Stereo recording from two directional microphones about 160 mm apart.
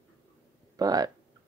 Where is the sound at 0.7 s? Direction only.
25° right (ahead or behind).